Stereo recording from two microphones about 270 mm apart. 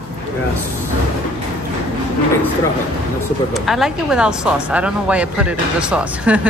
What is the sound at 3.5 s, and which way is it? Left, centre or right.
Speech, centre.